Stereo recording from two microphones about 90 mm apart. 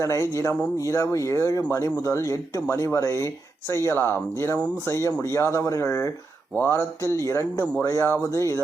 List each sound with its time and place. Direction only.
0.0 s speech: 35° left (ahead or behind)